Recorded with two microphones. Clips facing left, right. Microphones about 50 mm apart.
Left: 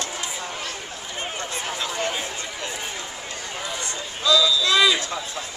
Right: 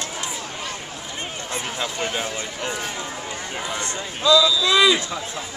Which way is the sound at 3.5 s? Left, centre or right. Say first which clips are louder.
Right 3 dB; centre.